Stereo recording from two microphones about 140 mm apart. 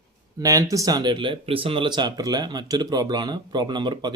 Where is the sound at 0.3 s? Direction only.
25° right (ahead or behind).